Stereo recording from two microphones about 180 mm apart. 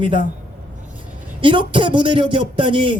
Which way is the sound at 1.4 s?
30° right (ahead or behind).